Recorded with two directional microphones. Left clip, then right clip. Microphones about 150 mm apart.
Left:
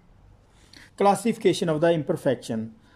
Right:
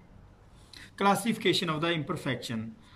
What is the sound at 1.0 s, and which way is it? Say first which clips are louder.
Speech: left 6 dB; 30° left (ahead or behind).